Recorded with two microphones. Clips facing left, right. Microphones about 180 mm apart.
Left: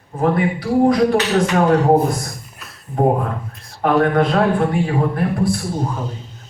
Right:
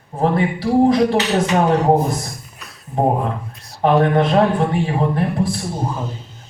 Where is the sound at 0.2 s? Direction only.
30° right (ahead or behind).